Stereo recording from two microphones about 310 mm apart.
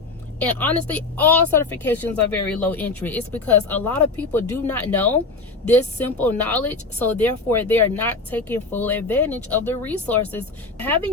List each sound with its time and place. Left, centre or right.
0.3 s speech: centre